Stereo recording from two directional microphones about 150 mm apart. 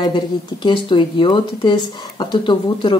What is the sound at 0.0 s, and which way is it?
Speech, 30° left (ahead or behind).